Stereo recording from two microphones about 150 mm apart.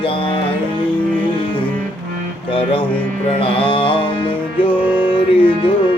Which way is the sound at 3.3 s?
35° left (ahead or behind).